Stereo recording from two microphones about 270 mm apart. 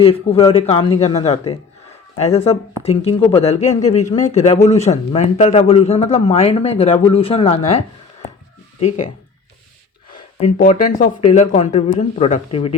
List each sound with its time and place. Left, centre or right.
0.0 s a man's voice: left
10.2 s a man's voice: left